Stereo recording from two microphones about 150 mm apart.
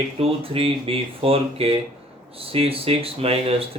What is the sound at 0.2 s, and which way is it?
Speech, 40° right (ahead or behind).